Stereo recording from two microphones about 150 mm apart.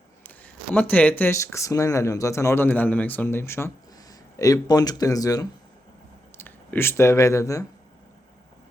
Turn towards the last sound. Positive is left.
turn(degrees=20)  # may be behind; listen again after turning